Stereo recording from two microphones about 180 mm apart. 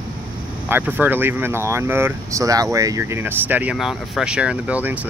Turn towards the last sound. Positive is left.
turn(degrees=-10)  # may be behind; listen again after turning